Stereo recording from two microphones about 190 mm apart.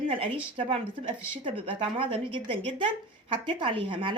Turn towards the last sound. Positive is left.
turn(degrees=-25)  # may be behind; listen again after turning